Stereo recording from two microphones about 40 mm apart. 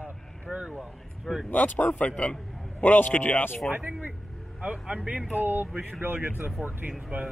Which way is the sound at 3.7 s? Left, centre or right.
Right.